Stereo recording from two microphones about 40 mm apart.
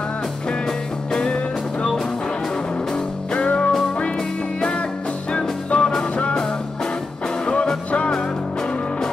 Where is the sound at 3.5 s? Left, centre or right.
Left.